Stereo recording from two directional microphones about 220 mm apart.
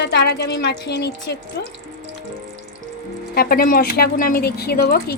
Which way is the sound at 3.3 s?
45° left (ahead or behind).